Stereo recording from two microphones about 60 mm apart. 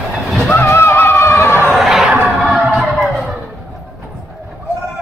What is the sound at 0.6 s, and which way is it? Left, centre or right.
Music, left.